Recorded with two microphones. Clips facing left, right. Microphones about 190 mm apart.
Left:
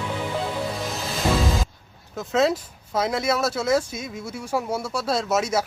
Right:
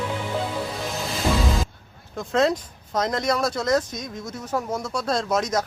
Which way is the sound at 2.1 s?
5° left (ahead or behind).